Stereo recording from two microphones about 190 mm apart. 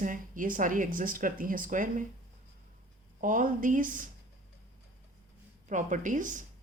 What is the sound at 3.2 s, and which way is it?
Speech, 45° right (ahead or behind).